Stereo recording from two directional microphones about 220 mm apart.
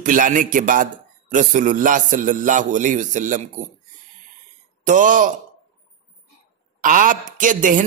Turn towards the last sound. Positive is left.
turn(degrees=-35)  # may be behind; listen again after turning